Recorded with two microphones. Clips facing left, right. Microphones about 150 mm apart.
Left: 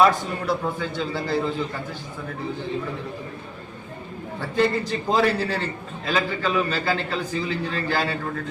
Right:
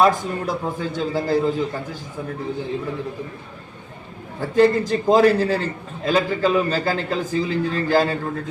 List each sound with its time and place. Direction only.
0.0 s a man's voice: 45° right (ahead or behind)
4.4 s a man's voice: 40° right (ahead or behind)